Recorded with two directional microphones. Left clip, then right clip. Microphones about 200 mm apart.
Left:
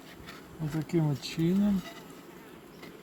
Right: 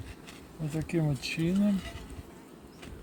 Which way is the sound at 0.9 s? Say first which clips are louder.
Even; 25° right (ahead or behind).